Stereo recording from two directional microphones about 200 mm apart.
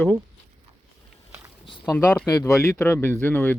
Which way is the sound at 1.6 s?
25° left (ahead or behind).